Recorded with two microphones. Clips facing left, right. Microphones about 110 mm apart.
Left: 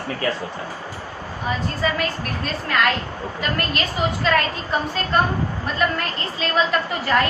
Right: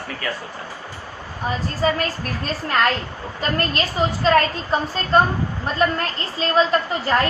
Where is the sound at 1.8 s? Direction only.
35° right (ahead or behind).